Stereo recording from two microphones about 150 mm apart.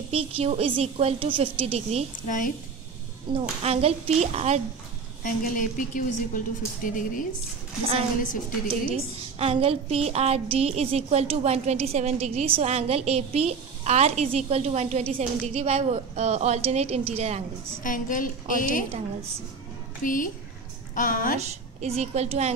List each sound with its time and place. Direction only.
0.1 s a woman's voice: 40° right (ahead or behind)
2.2 s a woman's voice: 60° left (ahead or behind)
3.3 s a woman's voice: 40° right (ahead or behind)
5.2 s a woman's voice: 65° left (ahead or behind)
8.9 s a woman's voice: 40° right (ahead or behind)
17.8 s a woman's voice: 60° left (ahead or behind)
20.0 s a woman's voice: 65° left (ahead or behind)
21.4 s a woman's voice: 45° right (ahead or behind)